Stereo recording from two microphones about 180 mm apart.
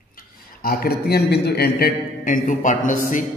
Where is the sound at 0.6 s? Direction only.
55° left (ahead or behind).